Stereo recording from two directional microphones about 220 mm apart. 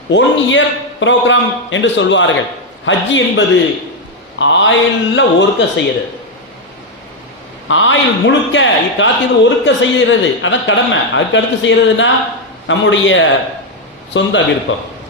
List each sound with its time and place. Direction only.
0.1 s speech: 55° left (ahead or behind)
7.7 s speech: 60° left (ahead or behind)